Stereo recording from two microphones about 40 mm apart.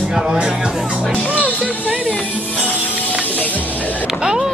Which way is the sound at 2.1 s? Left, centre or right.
Left.